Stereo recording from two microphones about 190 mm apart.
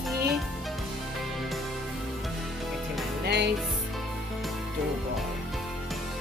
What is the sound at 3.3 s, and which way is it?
Music, 65° right (ahead or behind).